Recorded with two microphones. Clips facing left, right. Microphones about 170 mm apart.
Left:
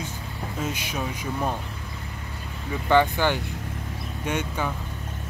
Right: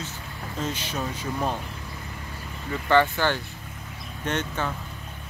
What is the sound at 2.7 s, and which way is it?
Speech, 15° left (ahead or behind).